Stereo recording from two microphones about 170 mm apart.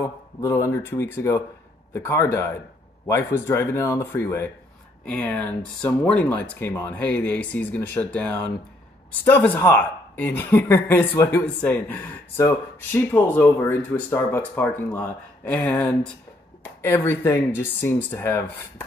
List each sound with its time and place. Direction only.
0.4 s speech: 20° left (ahead or behind)